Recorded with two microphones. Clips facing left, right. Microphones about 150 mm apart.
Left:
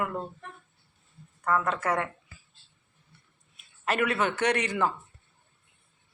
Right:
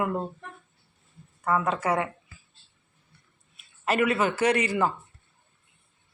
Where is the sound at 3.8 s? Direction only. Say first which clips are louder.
Right 3 dB; 5° right (ahead or behind).